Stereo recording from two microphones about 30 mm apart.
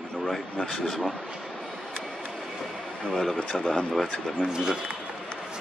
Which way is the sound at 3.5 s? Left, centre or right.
Left.